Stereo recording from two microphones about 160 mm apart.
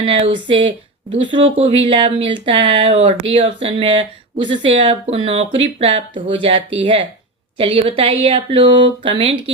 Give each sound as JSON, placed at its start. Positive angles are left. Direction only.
{"t": 0.0, "sound": "speech", "side_deg": -30}